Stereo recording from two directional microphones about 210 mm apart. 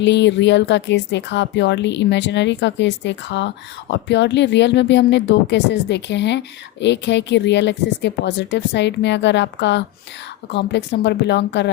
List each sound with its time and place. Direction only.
0.0 s speech: 55° left (ahead or behind)